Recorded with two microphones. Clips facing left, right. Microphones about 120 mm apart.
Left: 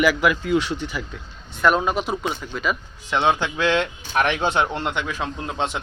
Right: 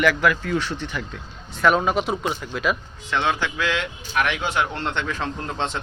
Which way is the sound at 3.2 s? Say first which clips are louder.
Left 3 dB; 20° left (ahead or behind).